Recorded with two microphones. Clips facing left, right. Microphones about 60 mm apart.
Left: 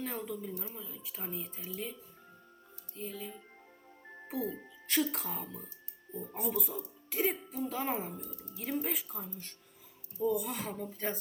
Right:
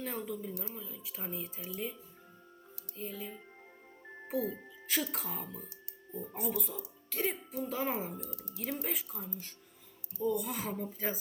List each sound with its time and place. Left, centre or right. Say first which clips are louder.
0.0 s speech: even; centre
2.9 s music: even; centre
4.3 s speech: right 2 dB; centre
8.2 s speech: right 1 dB; right
8.5 s speech: left 3 dB; centre